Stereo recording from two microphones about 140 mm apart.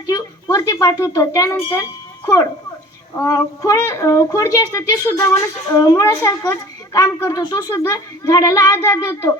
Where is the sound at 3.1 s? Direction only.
20° left (ahead or behind).